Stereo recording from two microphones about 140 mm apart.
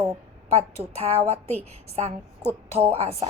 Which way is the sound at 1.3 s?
50° right (ahead or behind).